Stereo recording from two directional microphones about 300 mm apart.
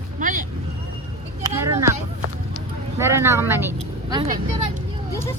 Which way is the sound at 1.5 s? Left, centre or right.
Centre.